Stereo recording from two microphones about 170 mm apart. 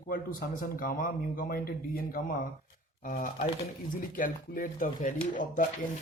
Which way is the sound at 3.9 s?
55° left (ahead or behind).